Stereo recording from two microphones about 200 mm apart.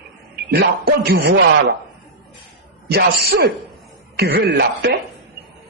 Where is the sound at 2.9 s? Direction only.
55° right (ahead or behind).